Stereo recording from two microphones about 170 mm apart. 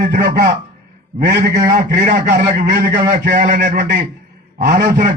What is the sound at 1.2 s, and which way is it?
Speech, 80° right.